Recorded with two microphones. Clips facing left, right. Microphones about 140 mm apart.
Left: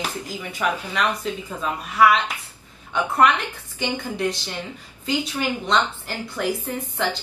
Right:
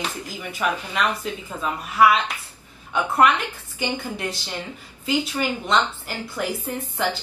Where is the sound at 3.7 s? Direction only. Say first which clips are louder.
Left 1 dB; 5° right (ahead or behind).